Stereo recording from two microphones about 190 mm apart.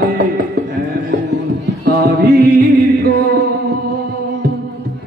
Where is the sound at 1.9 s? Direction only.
50° right (ahead or behind).